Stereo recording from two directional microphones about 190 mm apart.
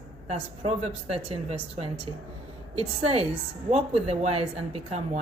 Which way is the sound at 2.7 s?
30° right (ahead or behind).